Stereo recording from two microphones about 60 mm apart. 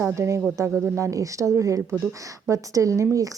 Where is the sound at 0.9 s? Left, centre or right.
Right.